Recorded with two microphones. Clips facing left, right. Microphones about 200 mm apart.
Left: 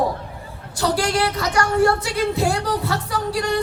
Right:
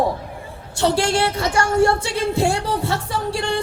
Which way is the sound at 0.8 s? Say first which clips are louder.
Right 2 dB; 25° right (ahead or behind).